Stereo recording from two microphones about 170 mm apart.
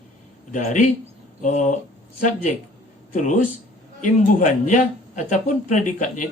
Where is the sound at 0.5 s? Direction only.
45° left (ahead or behind).